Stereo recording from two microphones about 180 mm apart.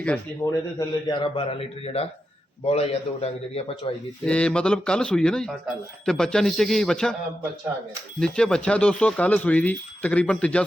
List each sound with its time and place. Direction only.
0.4 s speech: 15° left (ahead or behind)
0.8 s a man's voice: 25° left (ahead or behind)
4.3 s speech: 5° left (ahead or behind)
8.2 s speech: 5° left (ahead or behind)